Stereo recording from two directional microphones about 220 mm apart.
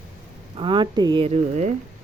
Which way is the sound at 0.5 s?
20° right (ahead or behind).